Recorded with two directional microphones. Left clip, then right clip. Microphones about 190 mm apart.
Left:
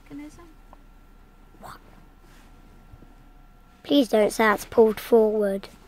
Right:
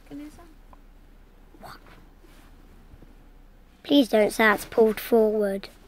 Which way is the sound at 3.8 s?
15° left (ahead or behind).